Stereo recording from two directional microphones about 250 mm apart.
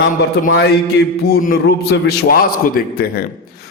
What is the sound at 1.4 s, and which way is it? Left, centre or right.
A man's voice, left.